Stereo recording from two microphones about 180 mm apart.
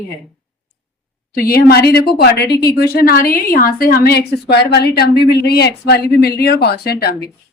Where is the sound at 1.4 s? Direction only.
55° left (ahead or behind).